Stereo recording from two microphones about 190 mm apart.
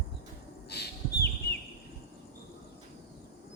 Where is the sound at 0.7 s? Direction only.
60° left (ahead or behind).